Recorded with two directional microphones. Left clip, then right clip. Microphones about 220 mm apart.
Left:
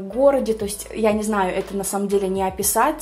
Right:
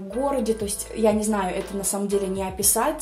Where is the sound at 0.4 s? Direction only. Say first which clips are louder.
Left 2 dB; 25° left (ahead or behind).